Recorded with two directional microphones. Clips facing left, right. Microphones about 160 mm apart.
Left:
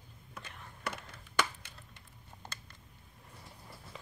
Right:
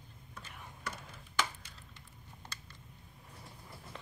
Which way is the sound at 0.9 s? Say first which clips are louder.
Left 4 dB; 65° left (ahead or behind).